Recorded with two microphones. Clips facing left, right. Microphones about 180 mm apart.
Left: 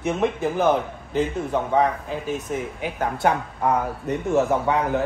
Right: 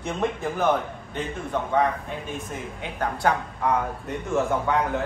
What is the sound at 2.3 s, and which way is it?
A man's voice, centre (ahead or behind).